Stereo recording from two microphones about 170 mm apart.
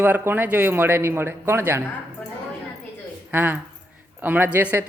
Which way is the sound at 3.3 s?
10° right (ahead or behind).